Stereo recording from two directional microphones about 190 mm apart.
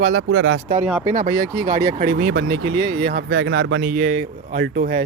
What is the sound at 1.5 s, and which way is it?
Speech, 15° right (ahead or behind).